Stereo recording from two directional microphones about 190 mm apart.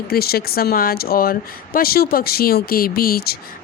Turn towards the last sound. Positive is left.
turn(degrees=55)  # may be behind; listen again after turning